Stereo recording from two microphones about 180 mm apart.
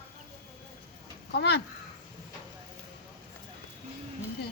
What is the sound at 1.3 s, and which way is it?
Speech, 65° left (ahead or behind).